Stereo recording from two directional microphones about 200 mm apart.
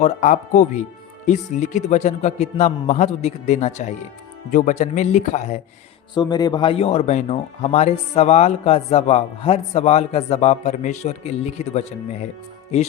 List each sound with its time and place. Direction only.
0.0 s speech: 40° left (ahead or behind)
6.1 s speech: 20° left (ahead or behind)